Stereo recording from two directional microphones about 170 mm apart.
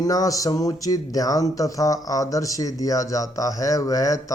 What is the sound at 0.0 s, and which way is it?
Speech, 20° left (ahead or behind).